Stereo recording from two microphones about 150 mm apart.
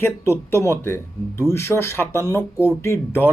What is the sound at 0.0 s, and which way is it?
Speech, 15° left (ahead or behind).